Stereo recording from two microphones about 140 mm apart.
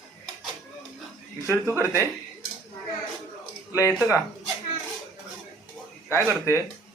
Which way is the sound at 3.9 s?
5° right (ahead or behind).